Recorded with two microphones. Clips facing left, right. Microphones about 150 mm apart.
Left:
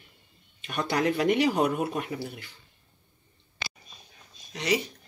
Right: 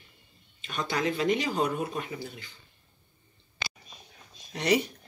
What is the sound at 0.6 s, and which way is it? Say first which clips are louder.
Speech: left 3 dB; 60° left (ahead or behind).